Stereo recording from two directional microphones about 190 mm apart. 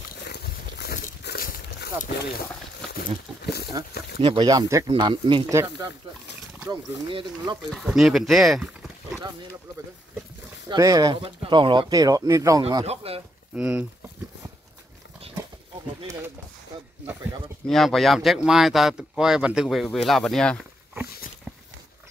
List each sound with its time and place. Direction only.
0.2 s a sound: 60° left (ahead or behind)
3.4 s speech: 60° left (ahead or behind)
4.2 s speech: 25° right (ahead or behind)
6.7 s speech: 25° right (ahead or behind)
7.7 s speech: centre (ahead or behind)
10.7 s speech: 20° right (ahead or behind)
12.6 s speech: 30° right (ahead or behind)
13.6 s speech: 5° right (ahead or behind)
17.6 s speech: centre (ahead or behind)